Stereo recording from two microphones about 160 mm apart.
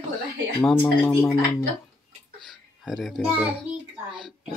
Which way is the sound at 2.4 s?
Centre (ahead or behind).